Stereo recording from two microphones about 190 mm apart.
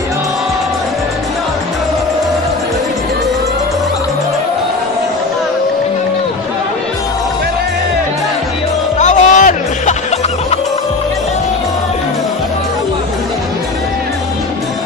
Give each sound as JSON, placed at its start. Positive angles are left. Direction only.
{"t": 8.9, "sound": "music", "side_deg": 40}